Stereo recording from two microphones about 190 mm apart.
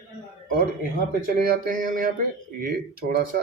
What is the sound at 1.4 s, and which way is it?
Speech, 50° right (ahead or behind).